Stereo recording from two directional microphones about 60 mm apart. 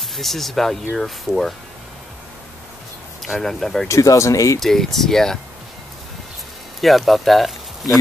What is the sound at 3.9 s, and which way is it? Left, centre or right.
Speech, left.